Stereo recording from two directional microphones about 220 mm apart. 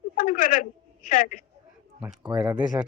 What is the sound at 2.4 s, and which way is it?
Speech, 15° right (ahead or behind).